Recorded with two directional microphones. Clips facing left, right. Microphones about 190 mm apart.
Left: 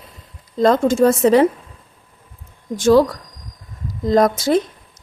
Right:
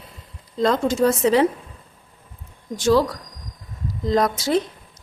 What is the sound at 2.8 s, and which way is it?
Speech, 50° left (ahead or behind).